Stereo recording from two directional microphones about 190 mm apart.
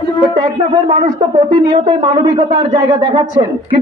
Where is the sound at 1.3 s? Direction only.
25° right (ahead or behind).